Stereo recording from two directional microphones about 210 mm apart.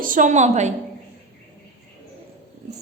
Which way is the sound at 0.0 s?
40° right (ahead or behind).